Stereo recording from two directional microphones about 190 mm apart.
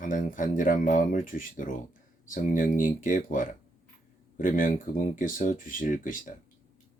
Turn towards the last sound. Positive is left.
turn(degrees=45)  # may be behind; listen again after turning